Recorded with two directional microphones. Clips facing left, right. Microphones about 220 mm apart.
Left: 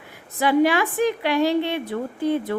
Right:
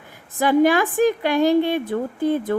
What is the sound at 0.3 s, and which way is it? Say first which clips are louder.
A woman's voice: right 2 dB; 45° right (ahead or behind).